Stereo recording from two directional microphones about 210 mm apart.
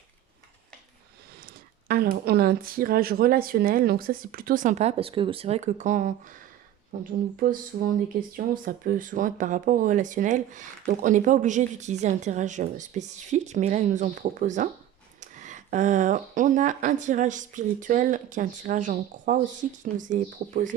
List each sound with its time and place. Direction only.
1.3 s speech: 45° right (ahead or behind)